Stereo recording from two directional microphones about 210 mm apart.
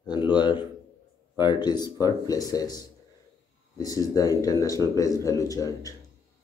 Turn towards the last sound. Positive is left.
turn(degrees=15)  # may be behind; listen again after turning